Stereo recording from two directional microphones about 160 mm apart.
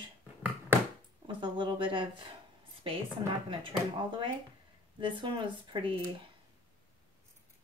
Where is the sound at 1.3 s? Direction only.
30° right (ahead or behind).